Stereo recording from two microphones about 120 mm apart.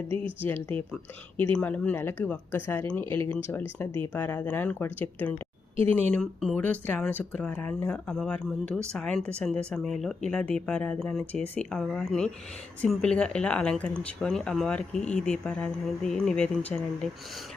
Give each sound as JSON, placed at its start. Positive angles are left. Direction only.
{"t": 1.4, "sound": "speech", "side_deg": 15}